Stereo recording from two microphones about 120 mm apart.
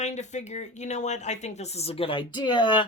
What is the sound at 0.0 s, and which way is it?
Speech, 75° left (ahead or behind).